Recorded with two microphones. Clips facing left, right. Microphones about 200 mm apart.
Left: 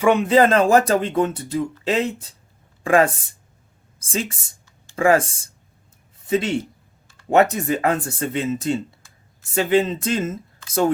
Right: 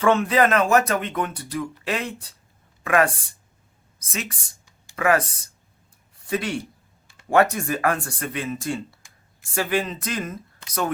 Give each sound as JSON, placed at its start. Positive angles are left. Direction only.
{"t": 0.0, "sound": "speech", "side_deg": 15}
{"t": 0.3, "sound": "speech", "side_deg": 30}